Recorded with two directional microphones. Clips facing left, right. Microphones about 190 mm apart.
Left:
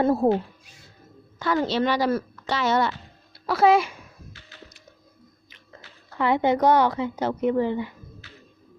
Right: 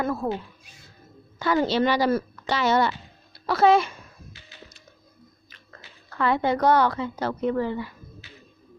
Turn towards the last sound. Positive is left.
turn(degrees=20)  # may be behind; listen again after turning